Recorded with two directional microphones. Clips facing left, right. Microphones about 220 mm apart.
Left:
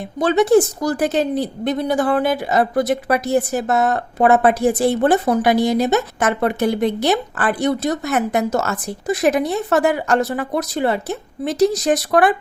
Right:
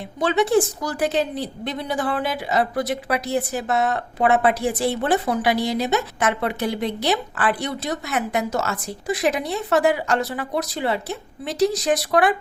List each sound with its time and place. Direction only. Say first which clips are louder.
0.2 s a woman's voice: left 5 dB; 40° left (ahead or behind)